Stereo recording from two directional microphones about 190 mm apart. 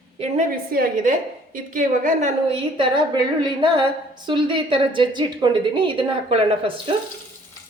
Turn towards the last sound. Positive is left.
turn(degrees=-30)  # may be behind; listen again after turning